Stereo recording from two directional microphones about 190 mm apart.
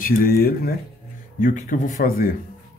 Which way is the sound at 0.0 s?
50° left (ahead or behind).